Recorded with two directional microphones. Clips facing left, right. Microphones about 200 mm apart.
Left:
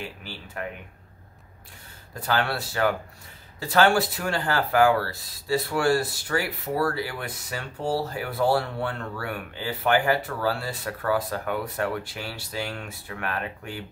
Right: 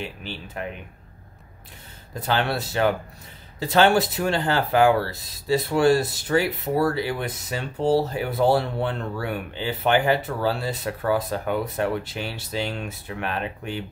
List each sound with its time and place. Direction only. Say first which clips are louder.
0.0 s speech: right 4 dB; 20° right (ahead or behind)
2.1 s speech: right 2 dB; 20° right (ahead or behind)